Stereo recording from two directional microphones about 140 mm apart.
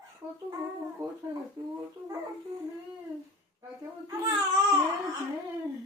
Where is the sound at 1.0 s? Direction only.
20° right (ahead or behind).